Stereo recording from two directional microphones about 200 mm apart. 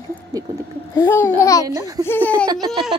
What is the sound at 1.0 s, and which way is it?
Speech, 15° left (ahead or behind).